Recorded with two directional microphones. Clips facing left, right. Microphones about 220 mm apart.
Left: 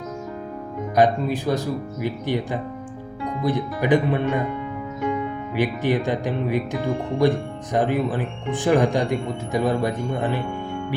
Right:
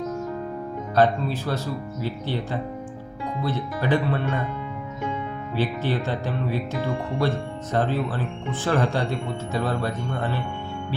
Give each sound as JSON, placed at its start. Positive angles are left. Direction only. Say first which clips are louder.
{"t": 0.9, "sound": "speech", "louder": "left 2 dB", "side_deg": 15}
{"t": 5.5, "sound": "speech", "louder": "left 4 dB", "side_deg": 15}